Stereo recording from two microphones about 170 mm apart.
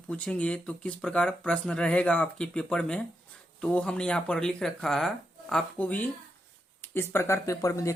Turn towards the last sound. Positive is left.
turn(degrees=20)  # may be behind; listen again after turning